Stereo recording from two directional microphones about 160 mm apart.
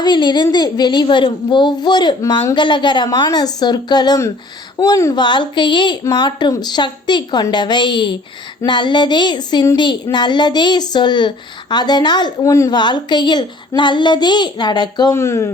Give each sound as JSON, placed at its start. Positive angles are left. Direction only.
{"t": 0.0, "sound": "speech", "side_deg": 25}